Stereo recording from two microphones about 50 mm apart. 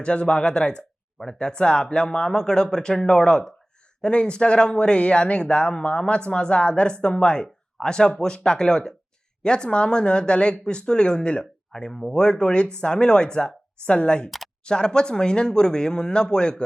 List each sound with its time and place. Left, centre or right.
0.0 s speech: left
14.3 s speech: centre
14.6 s speech: centre